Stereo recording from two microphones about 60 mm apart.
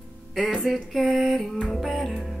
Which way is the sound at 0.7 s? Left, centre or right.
Centre.